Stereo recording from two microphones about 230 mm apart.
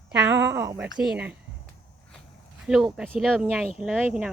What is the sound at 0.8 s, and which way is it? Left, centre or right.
Speech, centre.